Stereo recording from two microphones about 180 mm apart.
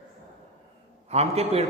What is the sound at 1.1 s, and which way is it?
Speech, 35° right (ahead or behind).